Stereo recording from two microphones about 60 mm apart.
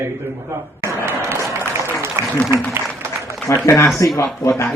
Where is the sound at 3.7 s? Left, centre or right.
Left.